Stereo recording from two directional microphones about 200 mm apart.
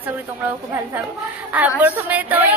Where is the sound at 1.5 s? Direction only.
10° right (ahead or behind).